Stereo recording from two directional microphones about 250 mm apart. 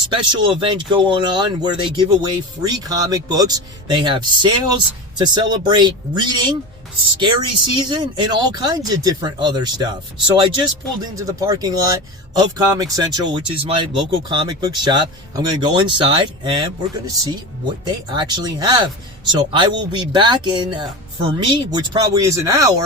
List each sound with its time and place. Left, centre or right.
0.1 s speech: centre